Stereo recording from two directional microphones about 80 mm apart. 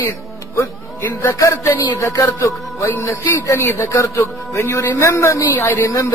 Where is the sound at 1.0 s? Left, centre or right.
Left.